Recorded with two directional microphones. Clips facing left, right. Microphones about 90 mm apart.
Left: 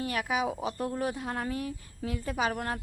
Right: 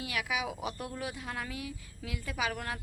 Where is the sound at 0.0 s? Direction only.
40° left (ahead or behind).